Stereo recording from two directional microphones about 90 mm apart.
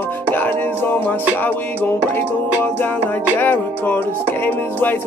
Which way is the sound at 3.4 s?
20° left (ahead or behind).